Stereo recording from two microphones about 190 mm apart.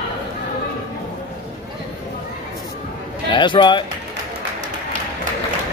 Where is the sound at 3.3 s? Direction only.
25° left (ahead or behind).